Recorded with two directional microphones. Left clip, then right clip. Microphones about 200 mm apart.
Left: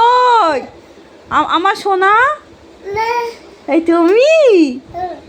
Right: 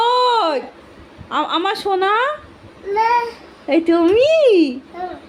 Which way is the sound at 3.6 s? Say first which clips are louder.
Left 3 dB; 5° left (ahead or behind).